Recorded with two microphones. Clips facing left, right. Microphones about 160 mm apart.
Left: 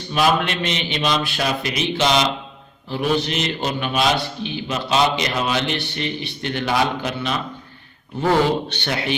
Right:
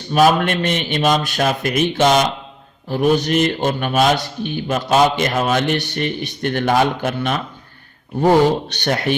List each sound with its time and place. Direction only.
0.1 s a man's voice: 45° right (ahead or behind)
8.2 s a man's voice: 40° right (ahead or behind)